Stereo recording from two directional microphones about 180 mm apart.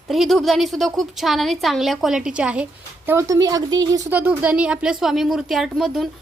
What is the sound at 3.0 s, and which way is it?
Speech, 15° right (ahead or behind).